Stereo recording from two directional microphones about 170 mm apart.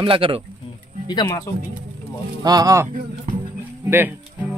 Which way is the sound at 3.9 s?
10° right (ahead or behind).